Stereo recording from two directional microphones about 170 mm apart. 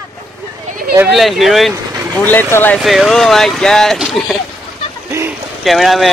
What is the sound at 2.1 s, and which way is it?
Speech, 10° left (ahead or behind).